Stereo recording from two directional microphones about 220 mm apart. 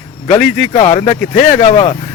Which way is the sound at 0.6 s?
30° left (ahead or behind).